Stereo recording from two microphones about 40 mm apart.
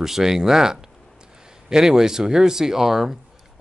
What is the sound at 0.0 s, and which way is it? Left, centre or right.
Speech, centre.